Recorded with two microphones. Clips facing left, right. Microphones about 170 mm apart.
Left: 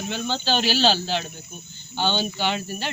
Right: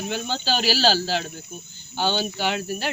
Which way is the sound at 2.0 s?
10° right (ahead or behind).